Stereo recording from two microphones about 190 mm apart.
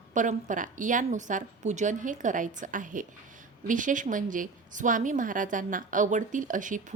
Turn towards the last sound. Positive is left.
turn(degrees=-45)  # may be behind; listen again after turning